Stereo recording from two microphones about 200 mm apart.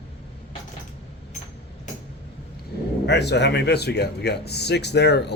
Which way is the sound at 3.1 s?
55° left (ahead or behind).